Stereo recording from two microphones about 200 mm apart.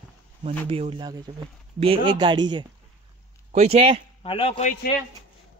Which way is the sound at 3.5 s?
35° right (ahead or behind).